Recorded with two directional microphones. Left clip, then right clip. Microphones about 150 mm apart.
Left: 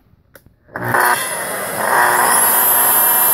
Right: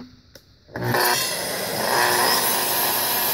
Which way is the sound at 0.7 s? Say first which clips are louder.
Left 6 dB; 30° right (ahead or behind).